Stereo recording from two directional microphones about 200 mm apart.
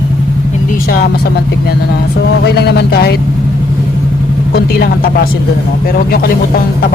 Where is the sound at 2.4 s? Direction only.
55° left (ahead or behind).